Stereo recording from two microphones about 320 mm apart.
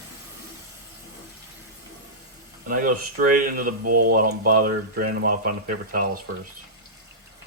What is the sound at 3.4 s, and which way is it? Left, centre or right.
Speech, right.